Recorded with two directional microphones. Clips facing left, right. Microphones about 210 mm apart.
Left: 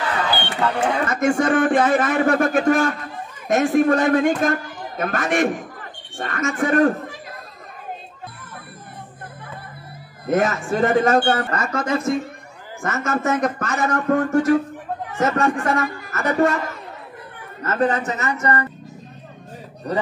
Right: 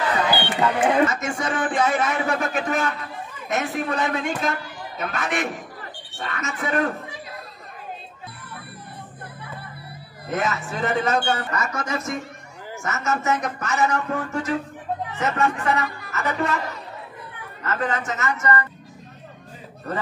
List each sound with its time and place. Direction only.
0.3 s a sound: 10° right (ahead or behind)
1.1 s a man's voice: 55° left (ahead or behind)
10.2 s a man's voice: 45° left (ahead or behind)
17.6 s a man's voice: 40° left (ahead or behind)